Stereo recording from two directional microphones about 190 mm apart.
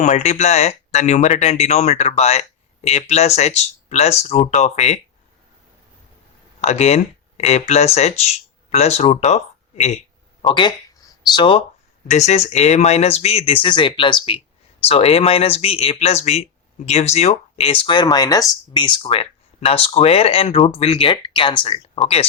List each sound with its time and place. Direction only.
0.0 s speech: 35° left (ahead or behind)
6.6 s speech: 35° left (ahead or behind)
10.4 s speech: 25° left (ahead or behind)